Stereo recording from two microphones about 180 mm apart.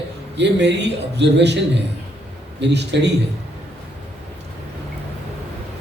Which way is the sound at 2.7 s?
70° right (ahead or behind).